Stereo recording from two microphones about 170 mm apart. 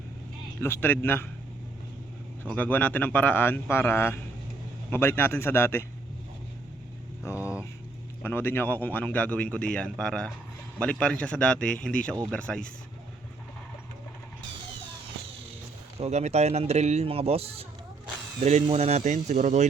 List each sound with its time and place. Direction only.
0.6 s speech: 10° left (ahead or behind)
2.6 s speech: 10° left (ahead or behind)
7.3 s vehicle: 10° right (ahead or behind)
8.2 s speech: 10° left (ahead or behind)
16.0 s a man's voice: 40° right (ahead or behind)